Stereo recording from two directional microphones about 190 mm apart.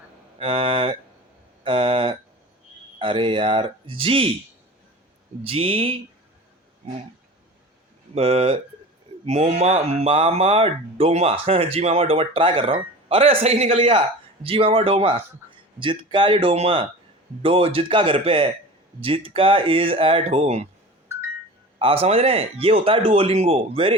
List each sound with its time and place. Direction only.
0.3 s speech: 25° right (ahead or behind)
1.6 s a sound: 25° right (ahead or behind)
3.0 s speech: 25° right (ahead or behind)
5.4 s speech: 30° right (ahead or behind)
8.1 s speech: 30° right (ahead or behind)
21.8 s speech: 30° right (ahead or behind)